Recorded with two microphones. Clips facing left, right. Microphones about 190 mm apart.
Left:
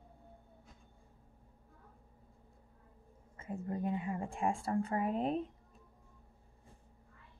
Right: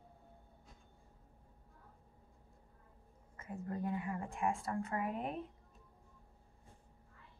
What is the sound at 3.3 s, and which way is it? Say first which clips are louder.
A woman's voice: left 3 dB; 25° left (ahead or behind).